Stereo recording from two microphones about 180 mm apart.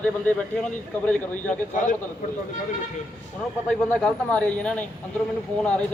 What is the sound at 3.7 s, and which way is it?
A man's voice, 5° left (ahead or behind).